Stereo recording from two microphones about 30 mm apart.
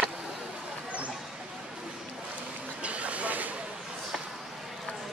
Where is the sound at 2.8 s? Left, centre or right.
Right.